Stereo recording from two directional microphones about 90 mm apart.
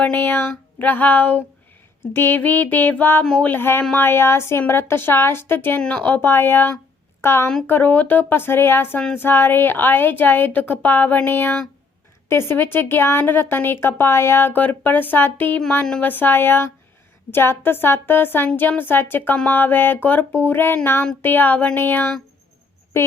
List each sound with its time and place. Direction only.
0.0 s speech: 20° left (ahead or behind)
3.2 s a sound: 10° left (ahead or behind)
3.5 s speech: 25° left (ahead or behind)
5.8 s a woman's voice: 10° left (ahead or behind)